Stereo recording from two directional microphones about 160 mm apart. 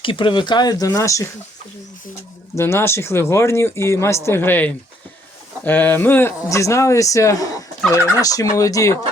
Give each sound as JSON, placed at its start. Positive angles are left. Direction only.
{"t": 0.0, "sound": "speech", "side_deg": 30}
{"t": 2.6, "sound": "speech", "side_deg": 15}